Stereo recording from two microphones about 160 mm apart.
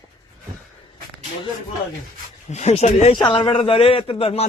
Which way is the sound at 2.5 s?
45° left (ahead or behind).